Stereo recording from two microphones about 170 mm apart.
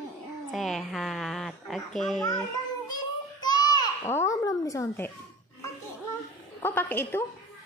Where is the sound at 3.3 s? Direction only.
25° left (ahead or behind).